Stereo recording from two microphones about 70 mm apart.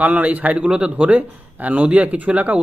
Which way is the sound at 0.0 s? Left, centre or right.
Right.